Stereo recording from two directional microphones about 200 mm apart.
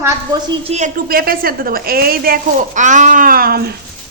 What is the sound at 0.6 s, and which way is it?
A woman's voice, 35° right (ahead or behind).